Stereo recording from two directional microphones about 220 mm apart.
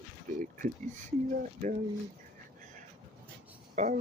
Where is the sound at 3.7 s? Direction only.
35° right (ahead or behind).